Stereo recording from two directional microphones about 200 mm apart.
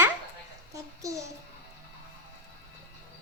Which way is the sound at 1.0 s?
15° right (ahead or behind).